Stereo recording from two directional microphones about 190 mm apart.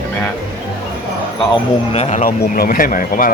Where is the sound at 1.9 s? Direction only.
35° left (ahead or behind).